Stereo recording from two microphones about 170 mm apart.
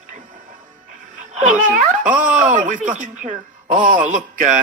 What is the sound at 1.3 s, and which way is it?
Speech, 50° right (ahead or behind).